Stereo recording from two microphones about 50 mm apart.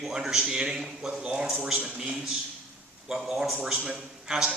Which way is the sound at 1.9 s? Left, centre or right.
Right.